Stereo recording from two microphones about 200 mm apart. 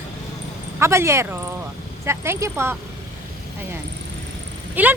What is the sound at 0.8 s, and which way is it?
Speech, 15° right (ahead or behind).